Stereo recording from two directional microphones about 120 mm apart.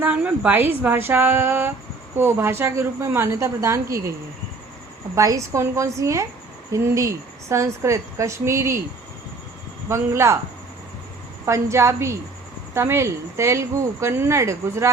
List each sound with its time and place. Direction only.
0.0 s a woman's voice: 10° right (ahead or behind)
5.1 s speech: 25° right (ahead or behind)
9.9 s speech: 20° right (ahead or behind)
11.4 s speech: 25° right (ahead or behind)